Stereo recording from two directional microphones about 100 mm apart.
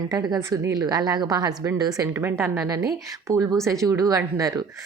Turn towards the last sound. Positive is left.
turn(degrees=-35)  # may be behind; listen again after turning